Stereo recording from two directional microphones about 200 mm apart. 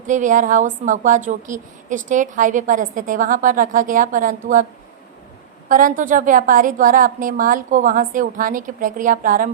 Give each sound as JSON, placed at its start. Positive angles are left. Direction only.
{"t": 0.1, "sound": "a woman's voice", "side_deg": -40}
{"t": 5.6, "sound": "a woman's voice", "side_deg": -40}